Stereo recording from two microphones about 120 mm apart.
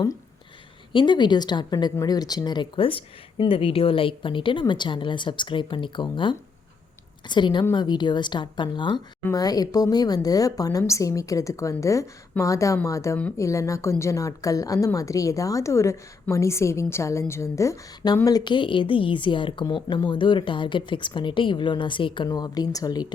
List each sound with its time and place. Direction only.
0.9 s a woman's voice: 40° left (ahead or behind)
22.3 s speech: 30° left (ahead or behind)